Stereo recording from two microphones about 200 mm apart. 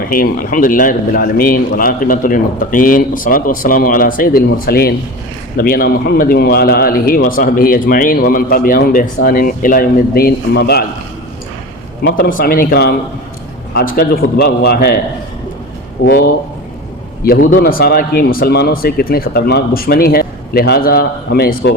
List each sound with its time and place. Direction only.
0.0 s a man's voice: 45° left (ahead or behind)
12.1 s a man's voice: 45° left (ahead or behind)
16.0 s a man's voice: 55° left (ahead or behind)
17.5 s a man's voice: 45° left (ahead or behind)